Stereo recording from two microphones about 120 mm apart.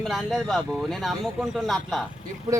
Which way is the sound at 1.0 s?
Centre (ahead or behind).